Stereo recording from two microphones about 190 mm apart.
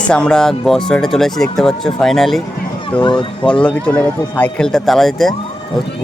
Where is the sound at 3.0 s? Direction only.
25° left (ahead or behind).